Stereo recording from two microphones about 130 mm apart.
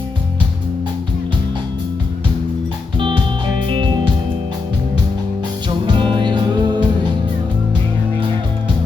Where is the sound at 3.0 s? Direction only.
40° right (ahead or behind).